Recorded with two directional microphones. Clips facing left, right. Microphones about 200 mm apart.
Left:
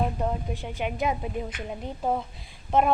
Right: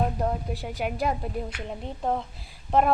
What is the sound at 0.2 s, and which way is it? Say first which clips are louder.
Speech: right 1 dB; 5° right (ahead or behind).